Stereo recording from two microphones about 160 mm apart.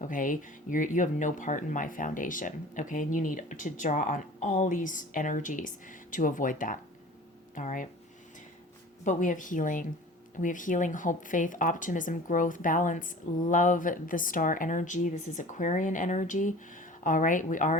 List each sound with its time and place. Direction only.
0.0 s speech: 55° left (ahead or behind)
9.0 s speech: 50° left (ahead or behind)